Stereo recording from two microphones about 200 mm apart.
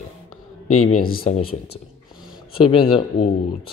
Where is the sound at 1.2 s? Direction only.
30° left (ahead or behind).